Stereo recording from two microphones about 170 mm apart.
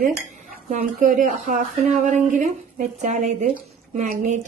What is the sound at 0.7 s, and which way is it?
A woman's voice, 45° right (ahead or behind).